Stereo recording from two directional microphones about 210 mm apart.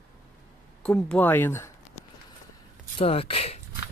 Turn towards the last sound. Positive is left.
turn(degrees=30)  # may be behind; listen again after turning